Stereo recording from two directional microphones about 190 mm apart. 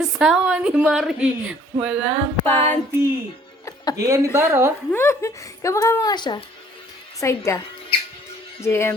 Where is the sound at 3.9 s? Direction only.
15° right (ahead or behind).